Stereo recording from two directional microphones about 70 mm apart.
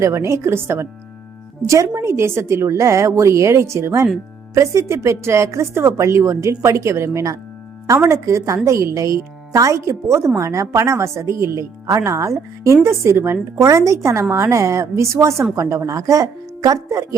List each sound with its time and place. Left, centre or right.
0.0 s a woman's voice: right
13.7 s speech: right